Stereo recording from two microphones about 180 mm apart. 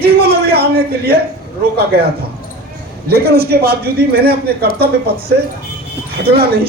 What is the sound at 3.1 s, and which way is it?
A man's voice, 60° right (ahead or behind).